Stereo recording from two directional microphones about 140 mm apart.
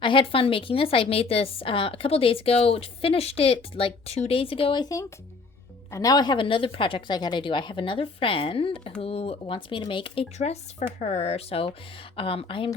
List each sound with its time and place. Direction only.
0.0 s a woman's voice: 40° left (ahead or behind)
10.3 s a woman's voice: 50° left (ahead or behind)